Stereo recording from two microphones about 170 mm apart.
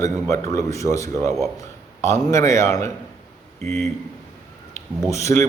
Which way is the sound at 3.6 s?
40° right (ahead or behind).